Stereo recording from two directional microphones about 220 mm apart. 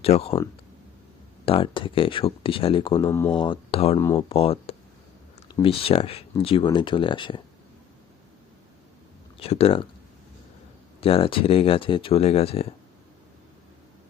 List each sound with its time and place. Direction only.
0.0 s speech: 25° left (ahead or behind)
1.5 s speech: 25° left (ahead or behind)
3.1 s speech: 10° left (ahead or behind)
3.3 s speech: 20° left (ahead or behind)
9.4 s speech: 25° left (ahead or behind)
11.0 s speech: 25° left (ahead or behind)